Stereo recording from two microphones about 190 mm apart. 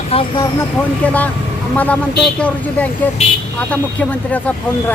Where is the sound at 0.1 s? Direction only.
30° left (ahead or behind).